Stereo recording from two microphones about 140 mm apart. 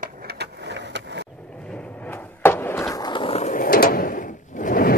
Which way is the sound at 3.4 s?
75° left (ahead or behind).